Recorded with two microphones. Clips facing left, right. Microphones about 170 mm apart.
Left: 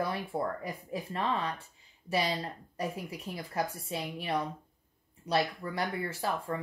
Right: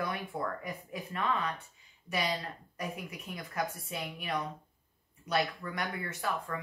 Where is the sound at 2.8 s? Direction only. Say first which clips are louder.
Left 4 dB; 30° left (ahead or behind).